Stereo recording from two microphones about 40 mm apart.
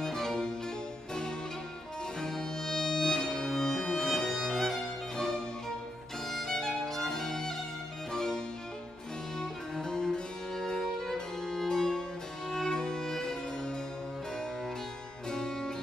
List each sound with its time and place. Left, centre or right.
0.0 s music: centre
2.1 s music: centre
5.1 s music: centre
6.2 s violin: centre
8.1 s music: centre
9.4 s music: centre
15.2 s music: centre